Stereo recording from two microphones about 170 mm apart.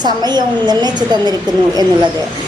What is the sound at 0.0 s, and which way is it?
A woman's voice, 25° right (ahead or behind).